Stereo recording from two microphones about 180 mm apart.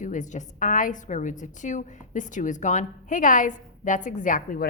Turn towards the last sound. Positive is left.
turn(degrees=50)  # may be behind; listen again after turning